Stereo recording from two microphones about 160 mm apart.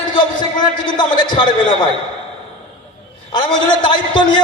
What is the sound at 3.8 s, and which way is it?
Speech, 30° left (ahead or behind).